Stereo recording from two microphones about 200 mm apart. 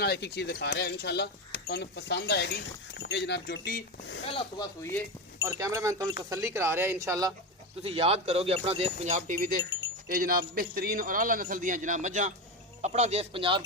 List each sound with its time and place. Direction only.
0.0 s speech: 55° left (ahead or behind)
5.5 s speech: 15° right (ahead or behind)
7.8 s a man's voice: 30° right (ahead or behind)